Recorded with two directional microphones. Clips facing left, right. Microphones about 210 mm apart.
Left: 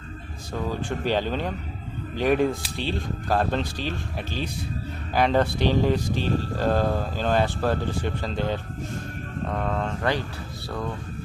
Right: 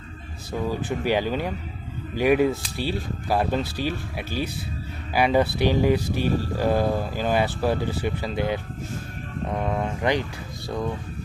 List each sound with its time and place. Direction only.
0.5 s speech: 10° right (ahead or behind)